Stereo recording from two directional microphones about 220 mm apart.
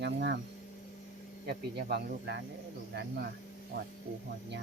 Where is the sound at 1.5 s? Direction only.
45° right (ahead or behind).